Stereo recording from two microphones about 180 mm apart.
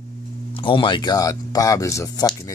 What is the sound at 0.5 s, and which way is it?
Speech, 30° left (ahead or behind).